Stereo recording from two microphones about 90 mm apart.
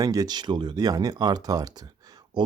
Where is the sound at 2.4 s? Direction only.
55° right (ahead or behind).